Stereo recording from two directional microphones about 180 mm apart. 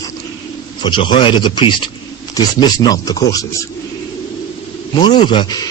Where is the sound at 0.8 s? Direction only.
25° left (ahead or behind).